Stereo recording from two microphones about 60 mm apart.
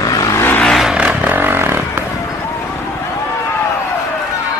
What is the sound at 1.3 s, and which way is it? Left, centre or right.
Vehicle, right.